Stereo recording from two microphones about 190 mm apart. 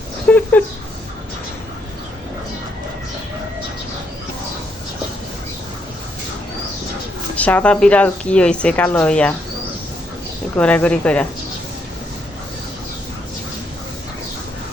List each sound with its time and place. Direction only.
0.3 s a sound: 10° left (ahead or behind)
7.3 s speech: 10° left (ahead or behind)
10.6 s speech: 5° left (ahead or behind)